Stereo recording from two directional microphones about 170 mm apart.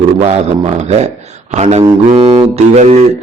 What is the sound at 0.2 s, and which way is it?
A man's voice, 35° right (ahead or behind).